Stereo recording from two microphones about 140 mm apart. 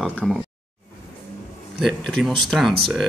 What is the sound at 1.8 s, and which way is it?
Speech, centre (ahead or behind).